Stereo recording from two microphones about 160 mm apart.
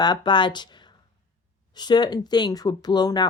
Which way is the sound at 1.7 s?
25° left (ahead or behind).